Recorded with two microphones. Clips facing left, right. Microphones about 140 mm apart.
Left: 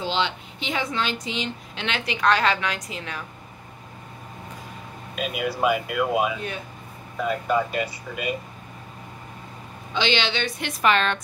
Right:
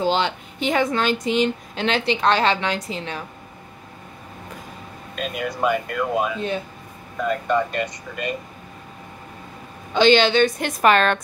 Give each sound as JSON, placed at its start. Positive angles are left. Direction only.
{"t": 0.0, "sound": "speech", "side_deg": -45}
{"t": 1.9, "sound": "a woman's voice", "side_deg": -30}
{"t": 5.1, "sound": "speech", "side_deg": 5}
{"t": 9.9, "sound": "a woman's voice", "side_deg": -45}